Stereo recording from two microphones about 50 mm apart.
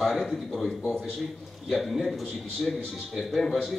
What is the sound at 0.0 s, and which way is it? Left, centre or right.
Speech, centre.